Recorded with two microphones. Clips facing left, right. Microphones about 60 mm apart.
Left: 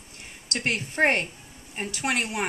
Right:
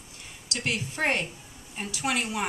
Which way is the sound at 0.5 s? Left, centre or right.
Left.